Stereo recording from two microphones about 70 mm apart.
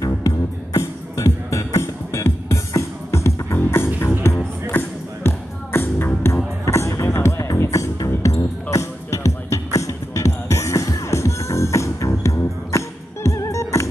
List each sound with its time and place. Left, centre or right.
0.7 s music: left